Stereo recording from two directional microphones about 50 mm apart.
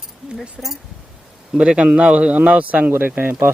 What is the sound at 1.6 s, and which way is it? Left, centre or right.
Speech, right.